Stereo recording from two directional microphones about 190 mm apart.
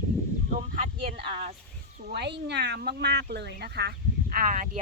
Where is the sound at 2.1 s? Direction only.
65° right (ahead or behind); by 4.6 s 45° right (ahead or behind).